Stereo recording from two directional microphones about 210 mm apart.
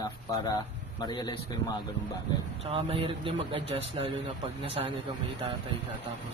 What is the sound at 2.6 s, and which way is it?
A man's voice, 25° right (ahead or behind).